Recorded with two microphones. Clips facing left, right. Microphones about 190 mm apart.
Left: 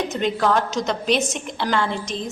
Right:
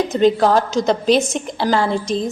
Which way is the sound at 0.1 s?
35° right (ahead or behind).